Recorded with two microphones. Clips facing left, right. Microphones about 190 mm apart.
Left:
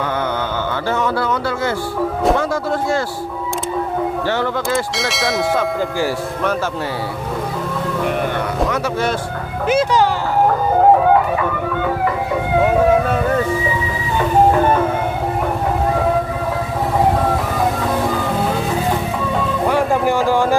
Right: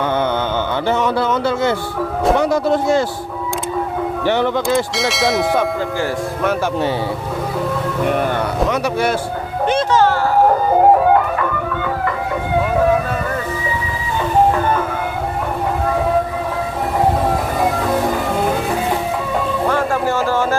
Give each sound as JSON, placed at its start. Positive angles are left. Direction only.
{"t": 0.9, "sound": "speech", "side_deg": -20}
{"t": 4.3, "sound": "speech", "side_deg": -15}
{"t": 4.9, "sound": "bell", "side_deg": 0}
{"t": 8.7, "sound": "speech", "side_deg": -10}
{"t": 9.6, "sound": "music", "side_deg": 10}
{"t": 19.6, "sound": "speech", "side_deg": 15}